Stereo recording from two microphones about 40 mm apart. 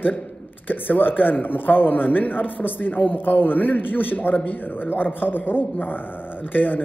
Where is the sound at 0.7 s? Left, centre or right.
Left.